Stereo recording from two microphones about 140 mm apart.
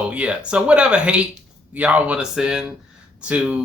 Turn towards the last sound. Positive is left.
turn(degrees=-10)  # may be behind; listen again after turning